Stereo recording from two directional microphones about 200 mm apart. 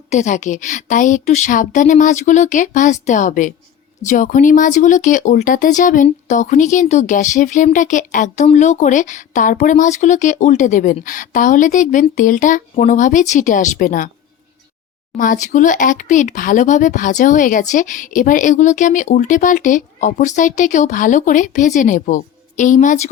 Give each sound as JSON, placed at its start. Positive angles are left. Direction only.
{"t": 0.1, "sound": "speech", "side_deg": 35}
{"t": 15.2, "sound": "speech", "side_deg": 40}